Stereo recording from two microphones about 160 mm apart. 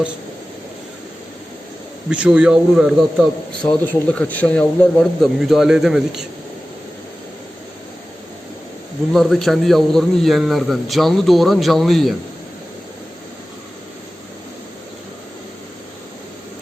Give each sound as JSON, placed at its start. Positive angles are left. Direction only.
{"t": 2.0, "sound": "a man's voice", "side_deg": -5}
{"t": 9.1, "sound": "a man's voice", "side_deg": 0}